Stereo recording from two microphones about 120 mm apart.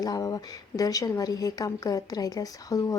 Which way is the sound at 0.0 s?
30° left (ahead or behind).